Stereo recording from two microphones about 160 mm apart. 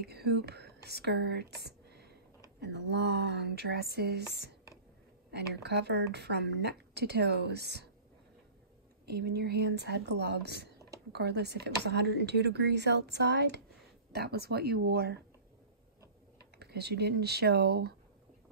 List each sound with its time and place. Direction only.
0.0 s a woman's voice: 90° right
9.0 s a woman's voice: 85° right
16.5 s a woman's voice: 90° right